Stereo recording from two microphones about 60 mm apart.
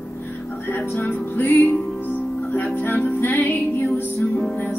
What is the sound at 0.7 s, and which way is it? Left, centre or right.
Music, left.